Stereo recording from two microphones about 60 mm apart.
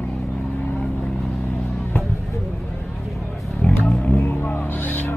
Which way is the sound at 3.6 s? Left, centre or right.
Left.